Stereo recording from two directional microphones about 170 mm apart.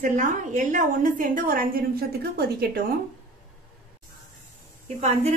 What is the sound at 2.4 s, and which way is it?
Speech, 70° right (ahead or behind).